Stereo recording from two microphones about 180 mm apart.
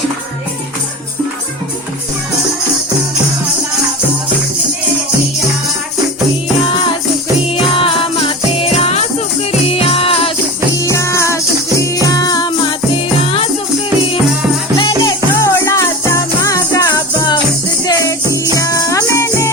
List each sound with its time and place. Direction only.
7.6 s music: 30° left (ahead or behind)
10.8 s music: 15° left (ahead or behind); by 13.5 s 30° left (ahead or behind)
14.8 s music: 25° left (ahead or behind)
18.5 s music: 20° left (ahead or behind)